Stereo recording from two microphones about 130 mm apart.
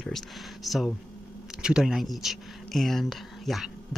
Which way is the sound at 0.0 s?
Centre (ahead or behind).